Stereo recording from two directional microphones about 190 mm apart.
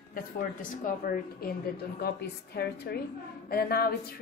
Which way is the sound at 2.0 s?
60° left (ahead or behind).